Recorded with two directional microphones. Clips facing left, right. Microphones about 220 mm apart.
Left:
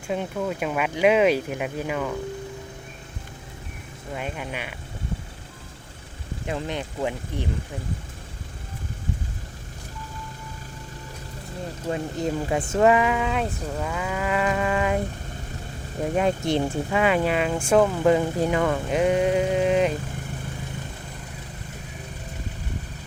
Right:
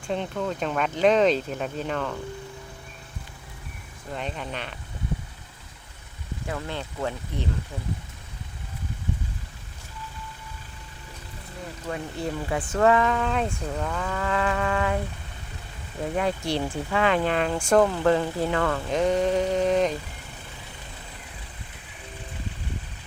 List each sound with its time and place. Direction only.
0.1 s speech: 10° left (ahead or behind)
4.1 s speech: 10° left (ahead or behind)
6.4 s speech: 20° left (ahead or behind)
11.9 s speech: 20° left (ahead or behind)
12.9 s speech: 10° left (ahead or behind)
16.1 s speech: 20° left (ahead or behind)